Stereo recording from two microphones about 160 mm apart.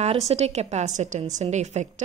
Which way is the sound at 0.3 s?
40° right (ahead or behind).